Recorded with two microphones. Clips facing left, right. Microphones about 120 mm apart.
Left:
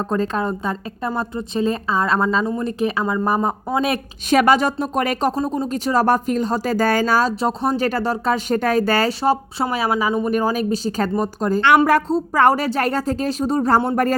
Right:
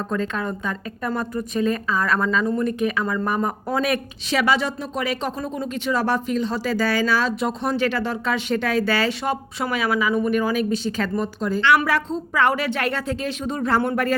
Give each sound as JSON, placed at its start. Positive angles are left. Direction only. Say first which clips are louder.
{"t": 0.0, "sound": "a woman's voice", "louder": "left 4 dB", "side_deg": 35}
{"t": 4.3, "sound": "speech", "louder": "left 6 dB", "side_deg": 50}